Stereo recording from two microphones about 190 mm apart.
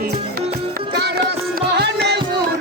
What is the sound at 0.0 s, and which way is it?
Music, 55° right (ahead or behind).